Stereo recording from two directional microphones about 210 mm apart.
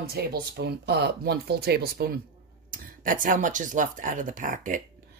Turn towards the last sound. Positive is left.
turn(degrees=-40)  # may be behind; listen again after turning